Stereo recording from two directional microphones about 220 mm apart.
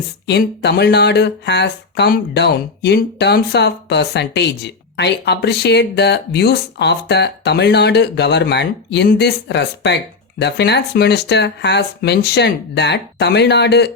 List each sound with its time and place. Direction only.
0.3 s speech: 50° left (ahead or behind)